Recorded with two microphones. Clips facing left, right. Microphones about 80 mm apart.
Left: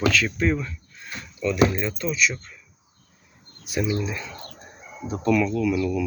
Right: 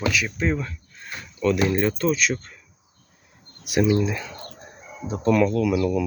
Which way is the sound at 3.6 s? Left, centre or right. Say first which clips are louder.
Right 5 dB; right.